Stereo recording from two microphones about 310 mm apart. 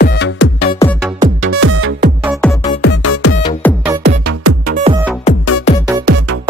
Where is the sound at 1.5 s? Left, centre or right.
Right.